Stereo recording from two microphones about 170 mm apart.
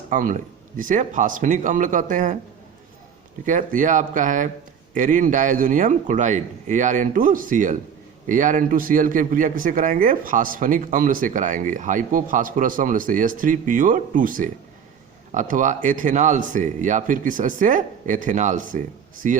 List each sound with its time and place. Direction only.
0.1 s a man's voice: 50° right (ahead or behind)
3.4 s a man's voice: 50° right (ahead or behind)